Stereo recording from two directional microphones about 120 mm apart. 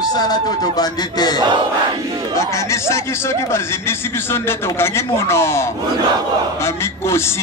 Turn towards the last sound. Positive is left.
turn(degrees=20)  # may be behind; listen again after turning